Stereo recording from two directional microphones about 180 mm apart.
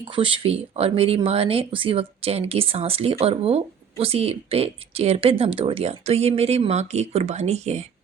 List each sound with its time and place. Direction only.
0.0 s speech: 30° right (ahead or behind)